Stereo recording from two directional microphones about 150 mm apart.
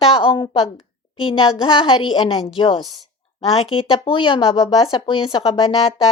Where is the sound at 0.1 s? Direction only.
35° left (ahead or behind).